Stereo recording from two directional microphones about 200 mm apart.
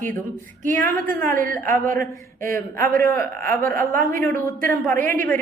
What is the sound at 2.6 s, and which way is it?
A woman's voice, 15° left (ahead or behind).